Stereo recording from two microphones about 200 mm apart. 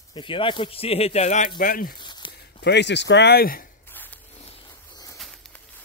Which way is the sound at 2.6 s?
60° left (ahead or behind).